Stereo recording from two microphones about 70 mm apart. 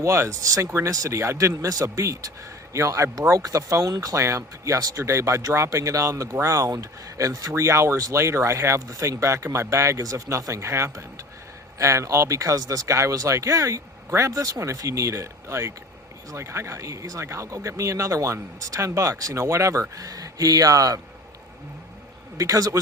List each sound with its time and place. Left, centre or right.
0.0 s speech: right
22.4 s a man's voice: right